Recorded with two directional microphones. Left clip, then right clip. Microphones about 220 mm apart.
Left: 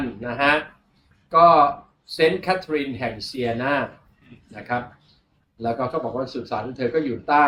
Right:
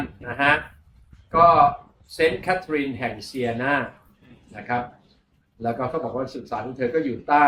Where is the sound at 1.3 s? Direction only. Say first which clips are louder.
Left 1 dB; 15° left (ahead or behind).